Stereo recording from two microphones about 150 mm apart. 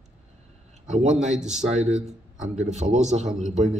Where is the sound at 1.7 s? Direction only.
50° right (ahead or behind).